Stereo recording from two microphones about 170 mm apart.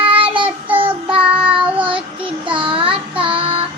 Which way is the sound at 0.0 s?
30° right (ahead or behind).